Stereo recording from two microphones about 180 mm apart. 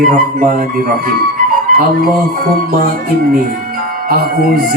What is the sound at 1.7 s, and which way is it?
Music, 55° right (ahead or behind).